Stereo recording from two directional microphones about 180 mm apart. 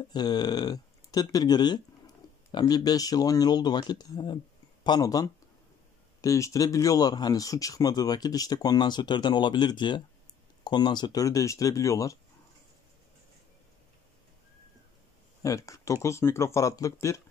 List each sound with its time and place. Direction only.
0.1 s speech: 25° left (ahead or behind)
15.4 s speech: 20° left (ahead or behind)